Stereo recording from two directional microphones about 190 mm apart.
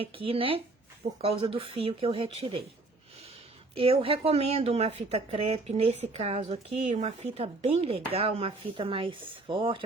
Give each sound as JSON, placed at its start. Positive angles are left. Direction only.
{"t": 0.0, "sound": "speech", "side_deg": -30}
{"t": 3.8, "sound": "speech", "side_deg": -30}